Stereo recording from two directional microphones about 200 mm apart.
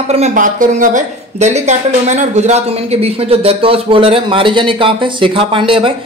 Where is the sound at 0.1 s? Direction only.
35° right (ahead or behind).